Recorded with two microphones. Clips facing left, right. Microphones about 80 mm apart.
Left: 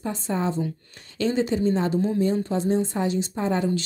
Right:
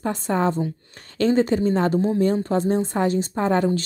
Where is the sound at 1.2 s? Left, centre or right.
Right.